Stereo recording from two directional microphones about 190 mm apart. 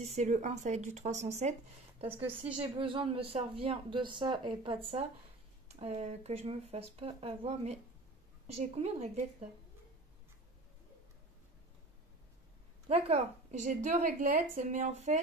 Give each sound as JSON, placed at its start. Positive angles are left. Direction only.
{"t": 0.0, "sound": "a woman's voice", "side_deg": -40}
{"t": 12.8, "sound": "a woman's voice", "side_deg": -35}